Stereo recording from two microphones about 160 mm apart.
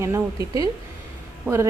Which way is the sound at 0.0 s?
20° right (ahead or behind).